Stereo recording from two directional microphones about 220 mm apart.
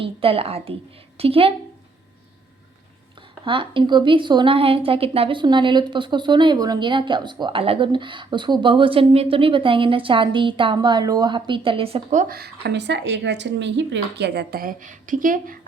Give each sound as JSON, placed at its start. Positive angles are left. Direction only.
{"t": 0.0, "sound": "a woman's voice", "side_deg": -25}
{"t": 3.4, "sound": "a woman's voice", "side_deg": -20}